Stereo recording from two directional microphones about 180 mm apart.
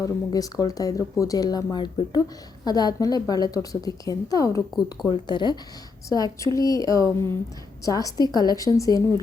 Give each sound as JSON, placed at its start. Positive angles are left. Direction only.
{"t": 0.0, "sound": "speech", "side_deg": 20}